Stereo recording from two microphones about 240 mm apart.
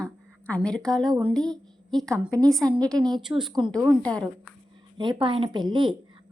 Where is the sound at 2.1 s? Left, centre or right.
Centre.